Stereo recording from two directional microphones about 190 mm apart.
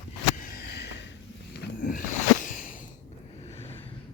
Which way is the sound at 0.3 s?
55° left (ahead or behind).